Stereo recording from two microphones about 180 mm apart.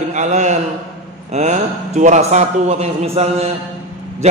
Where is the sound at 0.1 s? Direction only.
40° right (ahead or behind).